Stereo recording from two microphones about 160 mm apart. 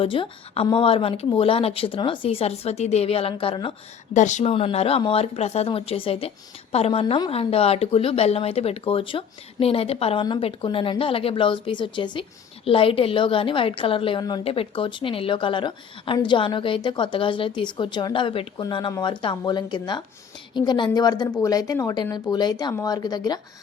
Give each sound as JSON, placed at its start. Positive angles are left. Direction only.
{"t": 0.0, "sound": "speech", "side_deg": 35}
{"t": 4.1, "sound": "speech", "side_deg": 50}
{"t": 4.5, "sound": "a woman's voice", "side_deg": 40}